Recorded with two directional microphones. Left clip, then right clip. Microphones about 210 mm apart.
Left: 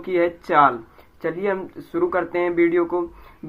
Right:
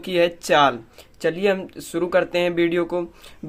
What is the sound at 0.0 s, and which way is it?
Speech, 55° right (ahead or behind).